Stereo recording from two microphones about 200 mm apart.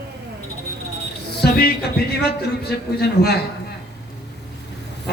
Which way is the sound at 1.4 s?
50° left (ahead or behind).